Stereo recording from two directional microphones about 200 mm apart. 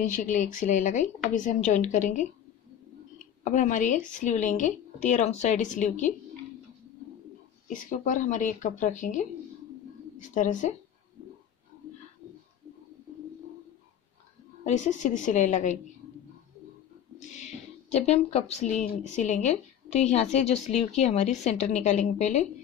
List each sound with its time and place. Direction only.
0.0 s a woman's voice: 40° left (ahead or behind)
3.4 s a woman's voice: 40° left (ahead or behind)
7.6 s a woman's voice: 40° left (ahead or behind)
14.6 s a woman's voice: 35° left (ahead or behind)
17.2 s a woman's voice: 35° left (ahead or behind)